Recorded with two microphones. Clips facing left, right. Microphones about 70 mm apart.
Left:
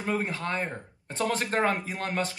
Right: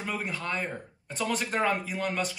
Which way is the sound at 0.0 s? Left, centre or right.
Left.